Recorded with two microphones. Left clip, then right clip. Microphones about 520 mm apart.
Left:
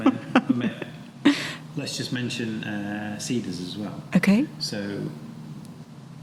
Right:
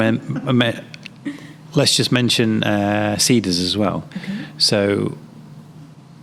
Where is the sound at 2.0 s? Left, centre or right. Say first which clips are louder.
Right 13 dB; right.